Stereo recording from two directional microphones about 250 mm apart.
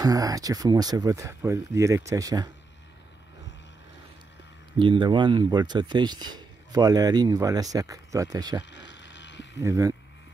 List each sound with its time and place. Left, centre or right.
0.0 s speech: centre
4.7 s speech: centre
8.7 s a sound: left
9.6 s speech: centre